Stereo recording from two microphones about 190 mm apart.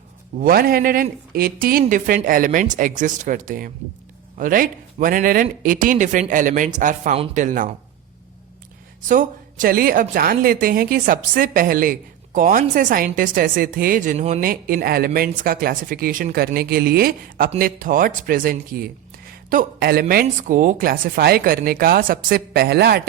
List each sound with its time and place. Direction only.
0.3 s a woman's voice: 50° right (ahead or behind)
9.0 s a woman's voice: 45° right (ahead or behind)